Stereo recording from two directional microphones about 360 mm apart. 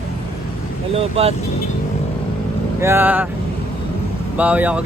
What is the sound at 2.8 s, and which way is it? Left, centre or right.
Speech, centre.